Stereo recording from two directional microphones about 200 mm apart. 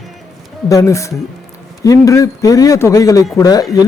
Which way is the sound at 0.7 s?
15° left (ahead or behind).